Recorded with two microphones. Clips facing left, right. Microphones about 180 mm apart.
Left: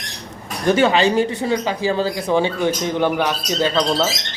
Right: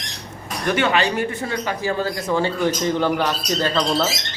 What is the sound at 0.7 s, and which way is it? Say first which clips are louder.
Speech: left 5 dB; 25° left (ahead or behind).